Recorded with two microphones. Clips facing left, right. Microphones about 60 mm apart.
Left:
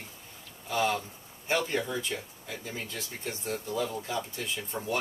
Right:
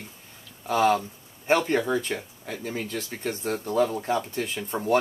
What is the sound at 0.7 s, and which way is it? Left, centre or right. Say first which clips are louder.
Speech: right 7 dB; right.